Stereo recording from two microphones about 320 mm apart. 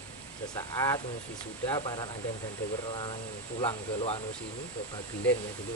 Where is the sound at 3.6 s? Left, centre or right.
Centre.